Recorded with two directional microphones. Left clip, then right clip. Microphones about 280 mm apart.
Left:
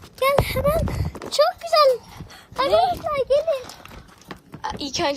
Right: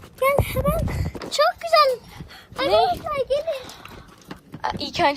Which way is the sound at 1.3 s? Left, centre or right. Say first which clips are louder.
Even; centre.